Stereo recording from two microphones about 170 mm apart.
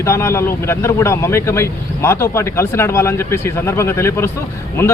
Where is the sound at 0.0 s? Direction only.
15° left (ahead or behind).